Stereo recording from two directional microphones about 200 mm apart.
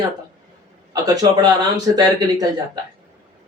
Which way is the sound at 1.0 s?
20° right (ahead or behind).